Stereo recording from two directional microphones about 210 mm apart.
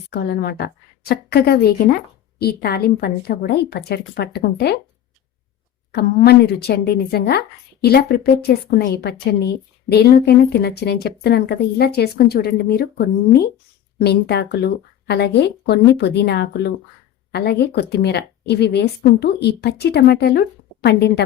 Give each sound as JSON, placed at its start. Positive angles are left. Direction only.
{"t": 0.1, "sound": "a woman's voice", "side_deg": 50}
{"t": 5.9, "sound": "a woman's voice", "side_deg": 50}